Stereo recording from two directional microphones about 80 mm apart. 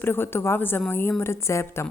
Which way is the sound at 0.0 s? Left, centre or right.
Left.